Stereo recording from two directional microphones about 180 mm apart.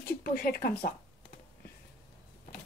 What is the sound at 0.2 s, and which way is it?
Speech, 55° left (ahead or behind).